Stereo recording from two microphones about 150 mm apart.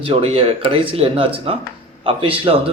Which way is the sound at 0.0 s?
40° right (ahead or behind).